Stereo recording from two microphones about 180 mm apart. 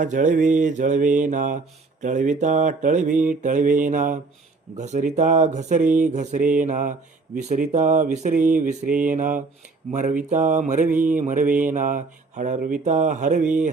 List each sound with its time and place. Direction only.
0.0 s mantra: 45° right (ahead or behind)